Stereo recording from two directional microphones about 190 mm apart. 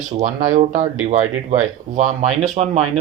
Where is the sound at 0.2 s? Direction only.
40° right (ahead or behind).